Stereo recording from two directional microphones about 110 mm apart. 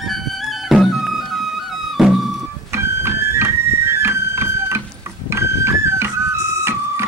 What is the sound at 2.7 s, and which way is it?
Music, 25° right (ahead or behind).